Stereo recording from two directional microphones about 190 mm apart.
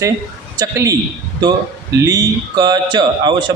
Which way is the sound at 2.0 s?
20° right (ahead or behind).